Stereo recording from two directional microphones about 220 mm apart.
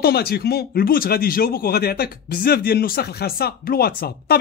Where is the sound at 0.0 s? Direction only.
45° left (ahead or behind).